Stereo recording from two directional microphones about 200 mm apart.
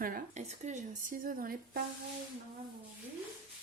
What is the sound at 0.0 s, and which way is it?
Speech, 40° right (ahead or behind).